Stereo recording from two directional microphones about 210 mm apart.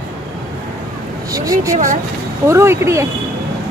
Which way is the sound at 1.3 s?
15° right (ahead or behind).